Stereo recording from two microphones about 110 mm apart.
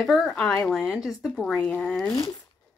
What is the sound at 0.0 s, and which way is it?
Speech, centre (ahead or behind).